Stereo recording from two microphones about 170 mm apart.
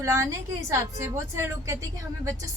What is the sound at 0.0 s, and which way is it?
A woman's voice, 15° right (ahead or behind).